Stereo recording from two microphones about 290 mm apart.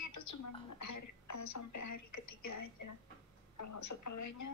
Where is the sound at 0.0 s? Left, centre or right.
Left.